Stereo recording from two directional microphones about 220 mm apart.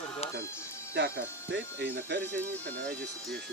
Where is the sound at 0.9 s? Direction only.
50° right (ahead or behind).